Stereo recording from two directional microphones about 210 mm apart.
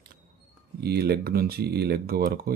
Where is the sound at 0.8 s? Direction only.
50° right (ahead or behind).